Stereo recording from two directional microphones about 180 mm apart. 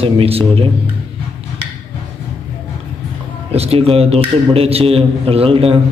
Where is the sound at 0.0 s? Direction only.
30° right (ahead or behind).